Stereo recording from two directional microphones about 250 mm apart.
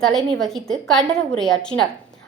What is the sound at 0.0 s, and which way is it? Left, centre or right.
A woman's voice, centre.